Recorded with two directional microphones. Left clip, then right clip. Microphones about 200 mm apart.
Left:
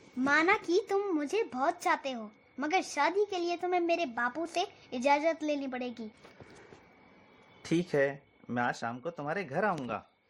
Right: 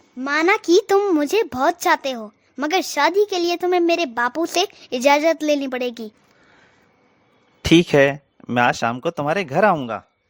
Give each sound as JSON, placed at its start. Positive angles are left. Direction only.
{"t": 0.3, "sound": "a child's voice", "side_deg": -55}
{"t": 7.6, "sound": "speech", "side_deg": -45}